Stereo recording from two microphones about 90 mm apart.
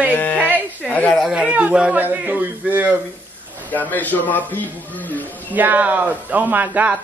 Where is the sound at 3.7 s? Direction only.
20° left (ahead or behind).